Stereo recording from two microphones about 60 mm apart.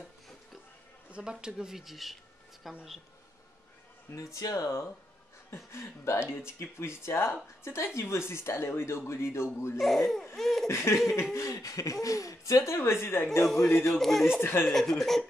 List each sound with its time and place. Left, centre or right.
1.1 s speech: centre
4.1 s speech: left
4.6 s speech: left
9.8 s speech: centre
10.7 s speech: left
11.5 s speech: left
12.7 s speech: left
13.4 s speech: centre
14.4 s speech: left
14.7 s speech: centre